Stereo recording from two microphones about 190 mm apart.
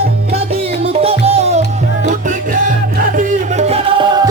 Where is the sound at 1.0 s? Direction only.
30° right (ahead or behind).